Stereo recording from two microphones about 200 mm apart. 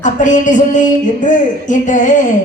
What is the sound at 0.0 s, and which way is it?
Speech, 40° left (ahead or behind).